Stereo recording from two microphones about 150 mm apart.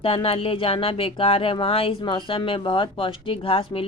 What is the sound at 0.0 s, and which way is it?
Speech, 40° left (ahead or behind).